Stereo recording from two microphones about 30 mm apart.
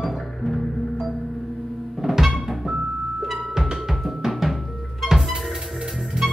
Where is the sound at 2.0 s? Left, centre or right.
Centre.